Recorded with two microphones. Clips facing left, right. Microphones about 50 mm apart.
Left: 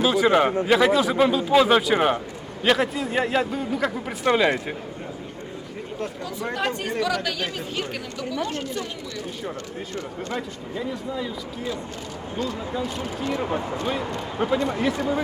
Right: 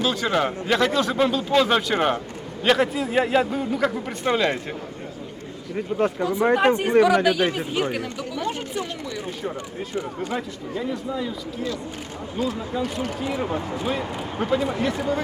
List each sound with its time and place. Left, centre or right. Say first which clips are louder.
0.0 s a man's voice: left 4 dB; centre
6.0 s speech: right 10 dB; right
9.9 s speech: right 3 dB; centre
10.8 s a man's voice: right 2 dB; centre
12.4 s a man's voice: right 2 dB; centre